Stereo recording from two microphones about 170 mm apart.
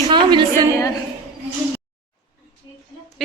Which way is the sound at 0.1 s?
30° right (ahead or behind).